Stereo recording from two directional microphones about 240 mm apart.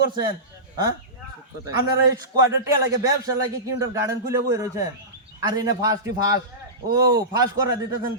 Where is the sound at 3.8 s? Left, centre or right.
Centre.